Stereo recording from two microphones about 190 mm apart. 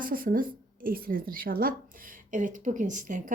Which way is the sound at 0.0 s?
50° right (ahead or behind).